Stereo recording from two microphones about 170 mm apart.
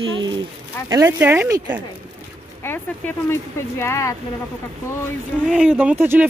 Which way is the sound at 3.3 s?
15° left (ahead or behind).